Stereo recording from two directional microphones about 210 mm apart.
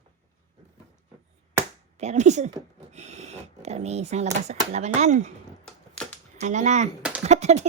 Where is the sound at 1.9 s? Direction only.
35° right (ahead or behind).